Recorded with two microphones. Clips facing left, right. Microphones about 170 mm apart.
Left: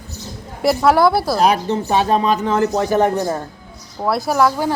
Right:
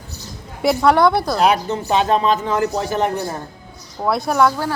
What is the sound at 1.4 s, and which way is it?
Speech, 35° left (ahead or behind).